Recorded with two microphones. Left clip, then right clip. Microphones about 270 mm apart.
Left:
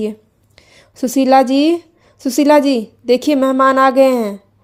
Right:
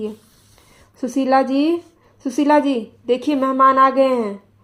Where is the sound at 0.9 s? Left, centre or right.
Left.